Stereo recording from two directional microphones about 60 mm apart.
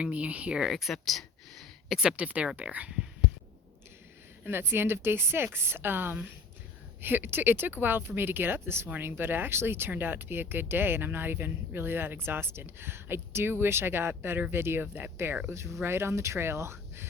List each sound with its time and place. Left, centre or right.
0.0 s speech: right
0.7 s a sound: centre
2.0 s speech: centre
4.4 s speech: right
15.4 s speech: right